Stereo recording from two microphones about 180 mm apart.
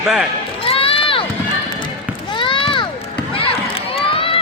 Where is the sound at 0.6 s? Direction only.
30° left (ahead or behind).